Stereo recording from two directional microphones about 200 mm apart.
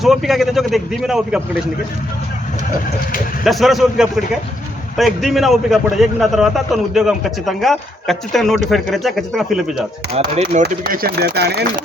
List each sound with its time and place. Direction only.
0.0 s a man's voice: centre (ahead or behind)
3.4 s a man's voice: centre (ahead or behind)
10.1 s speech: 35° right (ahead or behind)
10.6 s speech: 45° right (ahead or behind)